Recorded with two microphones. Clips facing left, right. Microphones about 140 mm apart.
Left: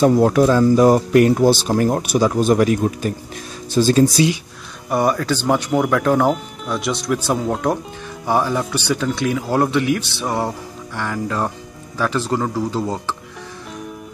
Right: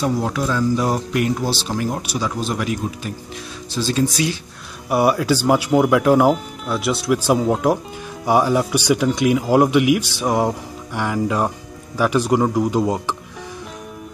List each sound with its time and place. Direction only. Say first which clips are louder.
0.0 s speech: left 8 dB; 50° left (ahead or behind)
4.8 s speech: right 1 dB; 10° right (ahead or behind)